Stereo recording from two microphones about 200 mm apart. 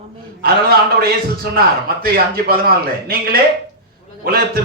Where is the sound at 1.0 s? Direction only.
50° right (ahead or behind).